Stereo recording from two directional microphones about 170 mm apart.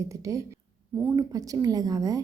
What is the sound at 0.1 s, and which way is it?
A woman's voice, 20° right (ahead or behind).